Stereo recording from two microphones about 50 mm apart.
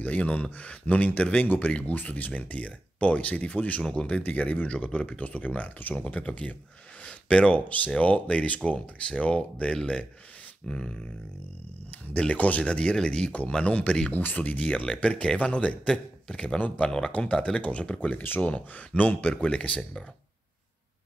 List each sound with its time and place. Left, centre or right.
0.0 s speech: left
3.8 s speech: centre
4.2 s speech: left; by 11.0 s centre
12.2 s speech: left
14.1 s a man's voice: left; by 16.5 s centre
16.5 s speech: left
17.2 s speech: centre